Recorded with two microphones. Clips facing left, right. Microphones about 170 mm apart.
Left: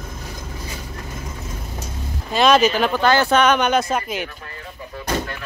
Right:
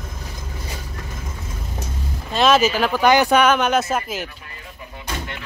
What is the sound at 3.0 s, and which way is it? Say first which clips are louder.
Speech: right 2 dB; 15° right (ahead or behind).